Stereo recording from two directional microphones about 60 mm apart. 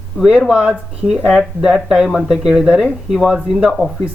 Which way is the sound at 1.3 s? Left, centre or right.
Centre.